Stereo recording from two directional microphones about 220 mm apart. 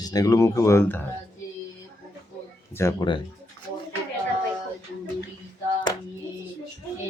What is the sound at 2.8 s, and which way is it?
Speech, 15° left (ahead or behind).